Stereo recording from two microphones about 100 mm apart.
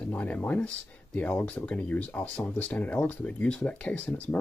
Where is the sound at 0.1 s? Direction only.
15° left (ahead or behind).